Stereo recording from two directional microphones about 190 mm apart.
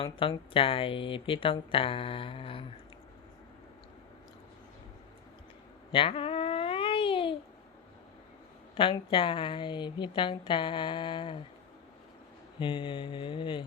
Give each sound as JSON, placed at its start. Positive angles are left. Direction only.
{"t": 0.0, "sound": "speech", "side_deg": 30}
{"t": 5.9, "sound": "cat", "side_deg": 30}
{"t": 8.7, "sound": "speech", "side_deg": 25}
{"t": 12.5, "sound": "speech", "side_deg": 25}